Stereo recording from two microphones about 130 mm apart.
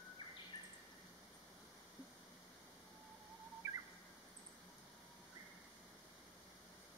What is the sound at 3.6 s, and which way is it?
Bird, 25° right (ahead or behind).